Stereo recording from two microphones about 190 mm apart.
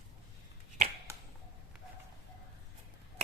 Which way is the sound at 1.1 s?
15° right (ahead or behind).